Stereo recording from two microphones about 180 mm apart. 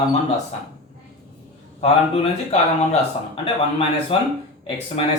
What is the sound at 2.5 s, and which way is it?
Speech, 35° left (ahead or behind).